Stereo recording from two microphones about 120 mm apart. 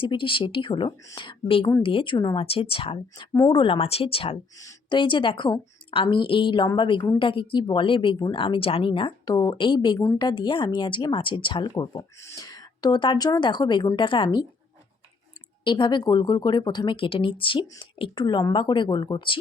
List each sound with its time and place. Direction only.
0.0 s speech: 45° left (ahead or behind)
15.6 s speech: 40° left (ahead or behind)